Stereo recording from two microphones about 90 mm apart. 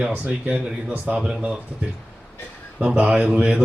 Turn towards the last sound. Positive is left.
turn(degrees=-10)  # may be behind; listen again after turning